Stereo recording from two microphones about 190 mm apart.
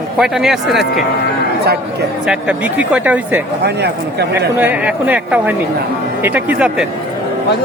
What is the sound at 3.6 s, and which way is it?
Speech, 60° right (ahead or behind).